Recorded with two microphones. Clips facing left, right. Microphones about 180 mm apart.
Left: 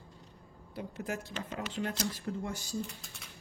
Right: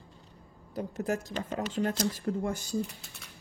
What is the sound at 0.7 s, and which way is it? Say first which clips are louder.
Speech: right 6 dB; 40° right (ahead or behind).